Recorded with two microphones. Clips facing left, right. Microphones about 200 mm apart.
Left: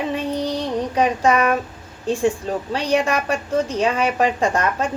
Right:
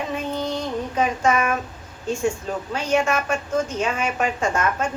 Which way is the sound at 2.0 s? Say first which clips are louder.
Left 4 dB; 35° left (ahead or behind).